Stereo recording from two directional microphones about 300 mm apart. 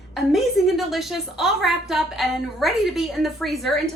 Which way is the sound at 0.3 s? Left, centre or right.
Centre.